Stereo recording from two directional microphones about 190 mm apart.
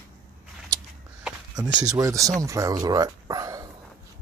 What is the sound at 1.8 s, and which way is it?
Speech, 15° right (ahead or behind).